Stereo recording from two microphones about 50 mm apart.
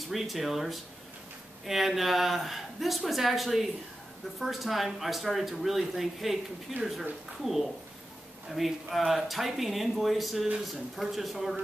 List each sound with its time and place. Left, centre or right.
0.1 s speech: centre